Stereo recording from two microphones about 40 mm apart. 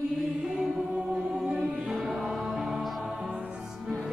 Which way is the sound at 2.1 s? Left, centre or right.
Centre.